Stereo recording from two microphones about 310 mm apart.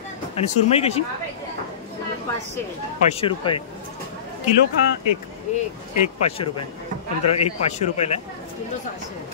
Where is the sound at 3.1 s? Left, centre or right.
Centre.